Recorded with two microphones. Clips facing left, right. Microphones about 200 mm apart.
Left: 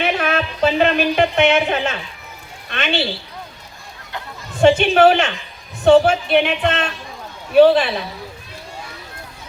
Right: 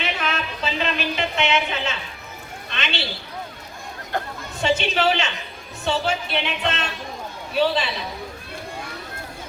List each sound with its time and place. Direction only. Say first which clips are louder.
0.0 s speech: left 8 dB; 55° left (ahead or behind)
4.1 s speech: right 5 dB; 45° right (ahead or behind)
4.6 s a man's voice: left 9 dB; 55° left (ahead or behind)